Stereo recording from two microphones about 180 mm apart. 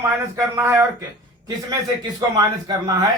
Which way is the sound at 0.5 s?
15° right (ahead or behind).